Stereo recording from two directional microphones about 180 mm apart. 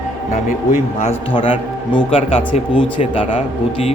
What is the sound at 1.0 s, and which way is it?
A man's voice, 30° left (ahead or behind).